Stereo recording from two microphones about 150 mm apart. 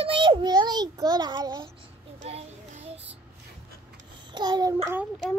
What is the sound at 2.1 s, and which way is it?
Child singing, 45° right (ahead or behind).